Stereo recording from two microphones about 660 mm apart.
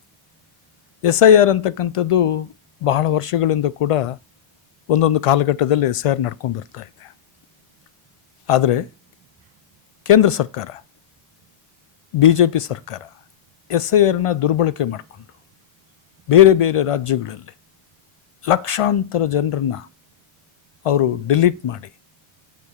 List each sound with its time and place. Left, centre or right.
1.0 s speech: left
8.4 s speech: left
10.1 s speech: left
12.2 s speech: left
16.5 s speech: left
20.8 s speech: left